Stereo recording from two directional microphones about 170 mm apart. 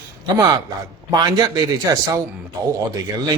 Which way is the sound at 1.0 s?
25° right (ahead or behind).